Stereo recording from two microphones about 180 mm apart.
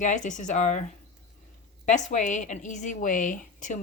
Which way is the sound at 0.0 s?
45° left (ahead or behind).